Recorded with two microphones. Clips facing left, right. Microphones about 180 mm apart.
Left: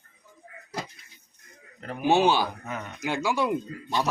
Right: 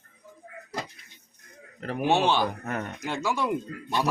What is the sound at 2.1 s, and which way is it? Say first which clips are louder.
Speech: left 2 dB; 5° left (ahead or behind).